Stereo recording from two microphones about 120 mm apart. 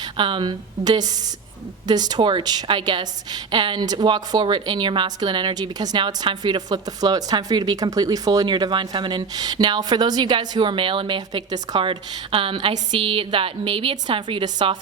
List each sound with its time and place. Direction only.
0.0 s a woman's voice: 40° right (ahead or behind)